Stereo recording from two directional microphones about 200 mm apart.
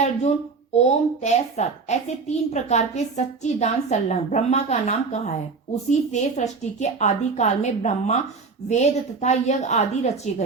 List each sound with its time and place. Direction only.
0.0 s speech: 35° left (ahead or behind)